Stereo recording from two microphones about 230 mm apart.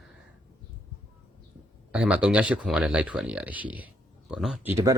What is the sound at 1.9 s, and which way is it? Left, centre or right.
Speech, centre.